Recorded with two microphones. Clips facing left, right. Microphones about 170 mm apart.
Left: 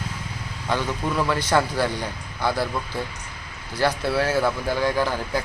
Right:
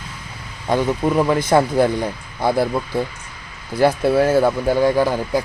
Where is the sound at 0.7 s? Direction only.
25° right (ahead or behind).